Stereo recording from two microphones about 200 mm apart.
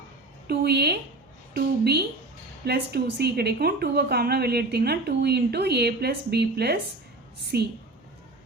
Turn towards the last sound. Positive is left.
turn(degrees=-55)  # may be behind; listen again after turning